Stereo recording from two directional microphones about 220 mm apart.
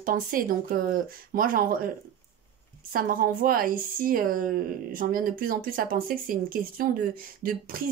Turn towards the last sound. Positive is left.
turn(degrees=-40)  # may be behind; listen again after turning